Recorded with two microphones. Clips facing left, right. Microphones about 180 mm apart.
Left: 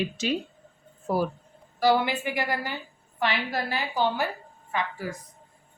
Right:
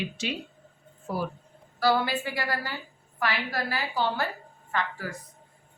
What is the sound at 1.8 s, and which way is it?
A woman's voice, 20° left (ahead or behind).